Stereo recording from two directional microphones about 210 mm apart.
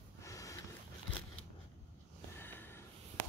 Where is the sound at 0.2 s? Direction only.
15° left (ahead or behind).